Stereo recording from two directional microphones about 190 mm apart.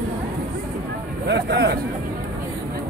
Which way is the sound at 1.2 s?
60° right (ahead or behind).